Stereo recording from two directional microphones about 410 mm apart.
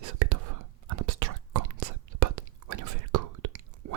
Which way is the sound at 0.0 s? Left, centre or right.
Right.